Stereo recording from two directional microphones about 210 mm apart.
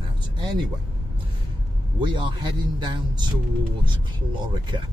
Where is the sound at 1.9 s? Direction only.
20° right (ahead or behind).